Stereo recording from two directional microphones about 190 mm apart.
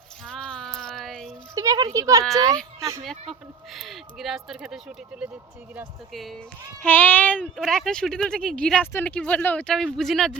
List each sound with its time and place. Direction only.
0.3 s music: 5° left (ahead or behind)
1.5 s a child's voice: 20° right (ahead or behind)
3.8 s speech: centre (ahead or behind)